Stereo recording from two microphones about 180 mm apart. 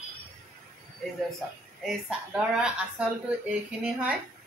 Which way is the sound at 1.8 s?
Centre (ahead or behind).